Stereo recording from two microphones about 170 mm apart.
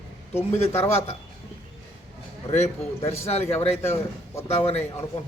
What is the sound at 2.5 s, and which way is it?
Speech, 40° left (ahead or behind).